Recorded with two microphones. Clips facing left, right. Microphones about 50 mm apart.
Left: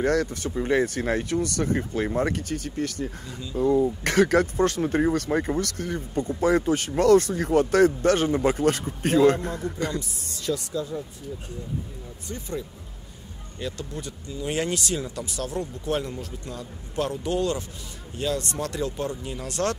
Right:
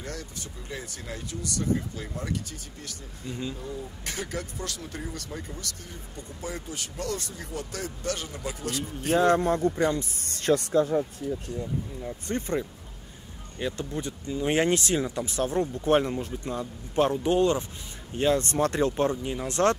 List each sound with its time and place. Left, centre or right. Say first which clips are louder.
0.0 s speech: left 15 dB; left
4.6 s speech: left 14 dB; left
9.8 s speech: right 3 dB; right
10.2 s speech: right 7 dB; right
12.3 s speech: right 5 dB; right
13.6 s speech: right 2 dB; right